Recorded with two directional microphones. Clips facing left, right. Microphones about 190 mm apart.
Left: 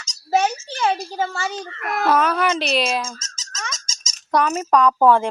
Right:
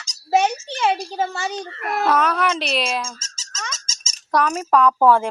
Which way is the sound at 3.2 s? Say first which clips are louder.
Left 2 dB; 30° right (ahead or behind).